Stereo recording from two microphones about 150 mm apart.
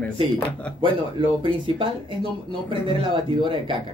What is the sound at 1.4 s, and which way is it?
Speech, 35° right (ahead or behind).